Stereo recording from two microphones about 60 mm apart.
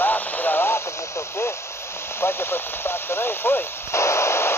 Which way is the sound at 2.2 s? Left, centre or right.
Left.